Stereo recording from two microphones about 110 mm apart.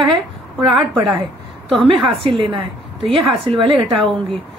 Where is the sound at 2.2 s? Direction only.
50° right (ahead or behind).